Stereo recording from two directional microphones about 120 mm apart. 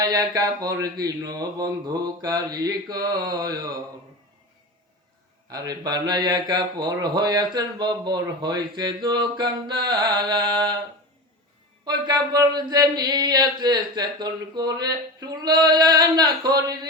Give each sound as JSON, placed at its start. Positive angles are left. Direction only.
{"t": 0.0, "sound": "speech", "side_deg": -30}
{"t": 5.5, "sound": "speech", "side_deg": -30}
{"t": 11.9, "sound": "speech", "side_deg": -35}